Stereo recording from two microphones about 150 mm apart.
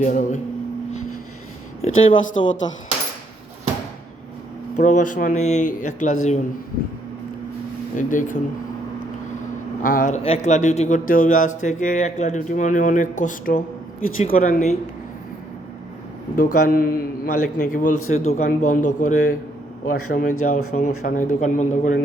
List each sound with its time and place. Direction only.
0.0 s speech: 55° left (ahead or behind)
1.8 s speech: 40° left (ahead or behind)
4.8 s speech: 55° left (ahead or behind)
7.9 s speech: 60° left (ahead or behind)
9.8 s speech: 65° left (ahead or behind)
10.2 s speech: 50° left (ahead or behind); by 14.7 s 70° left (ahead or behind)
16.3 s speech: 65° left (ahead or behind); by 18.4 s 50° left (ahead or behind)
18.4 s speech: 60° left (ahead or behind)